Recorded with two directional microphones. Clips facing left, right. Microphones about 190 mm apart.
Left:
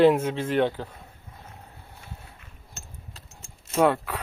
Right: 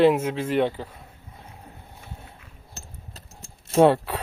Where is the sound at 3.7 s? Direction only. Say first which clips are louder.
Right 5 dB; 30° right (ahead or behind).